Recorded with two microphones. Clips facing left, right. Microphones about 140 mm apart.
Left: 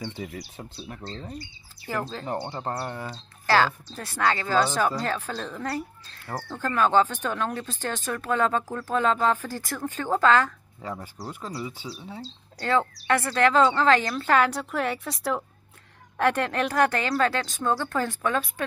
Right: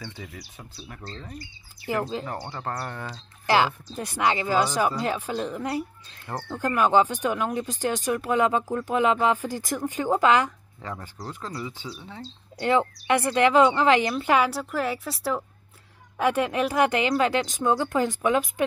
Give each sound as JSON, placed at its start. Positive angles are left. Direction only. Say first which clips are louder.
{"t": 0.0, "sound": "speech", "louder": "left 5 dB", "side_deg": 20}
{"t": 1.9, "sound": "speech", "louder": "right 4 dB", "side_deg": -15}
{"t": 2.2, "sound": "speech", "louder": "left 2 dB", "side_deg": 25}
{"t": 3.4, "sound": "speech", "louder": "even", "side_deg": -15}
{"t": 10.8, "sound": "speech", "louder": "left 1 dB", "side_deg": 10}
{"t": 12.5, "sound": "speech", "louder": "right 2 dB", "side_deg": -15}